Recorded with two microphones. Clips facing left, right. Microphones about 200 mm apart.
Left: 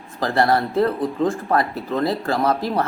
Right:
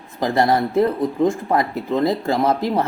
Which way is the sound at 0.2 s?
15° right (ahead or behind).